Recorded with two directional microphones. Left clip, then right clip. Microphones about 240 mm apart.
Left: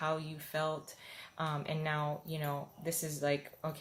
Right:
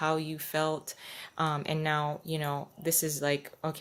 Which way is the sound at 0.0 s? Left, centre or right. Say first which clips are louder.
Right 6 dB; right.